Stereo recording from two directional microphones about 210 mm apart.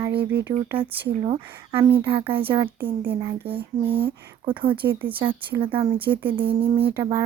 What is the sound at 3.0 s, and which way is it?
Speech, 10° right (ahead or behind).